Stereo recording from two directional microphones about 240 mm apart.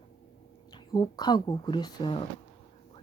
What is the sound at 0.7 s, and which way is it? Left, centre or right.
Speech, centre.